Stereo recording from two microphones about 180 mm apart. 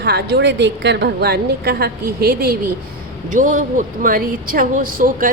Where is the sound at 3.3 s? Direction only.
45° right (ahead or behind).